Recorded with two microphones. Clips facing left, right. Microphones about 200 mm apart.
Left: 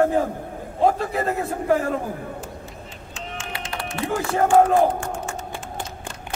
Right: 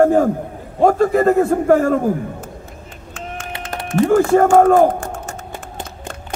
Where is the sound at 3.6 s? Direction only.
45° right (ahead or behind).